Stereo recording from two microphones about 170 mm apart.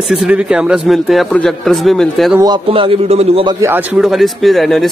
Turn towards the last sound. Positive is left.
turn(degrees=0)  # may be behind; listen again after turning